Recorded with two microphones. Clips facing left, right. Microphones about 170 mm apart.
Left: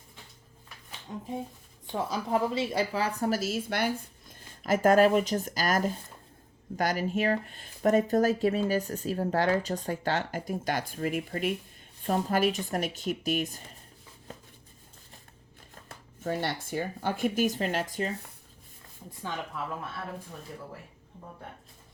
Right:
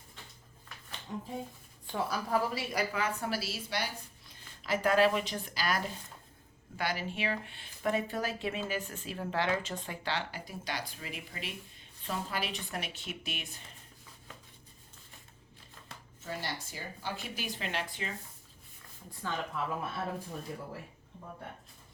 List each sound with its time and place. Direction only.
1.9 s speech: 20° left (ahead or behind); by 13.6 s 40° left (ahead or behind)
15.7 s speech: 50° left (ahead or behind)
19.6 s speech: 5° left (ahead or behind)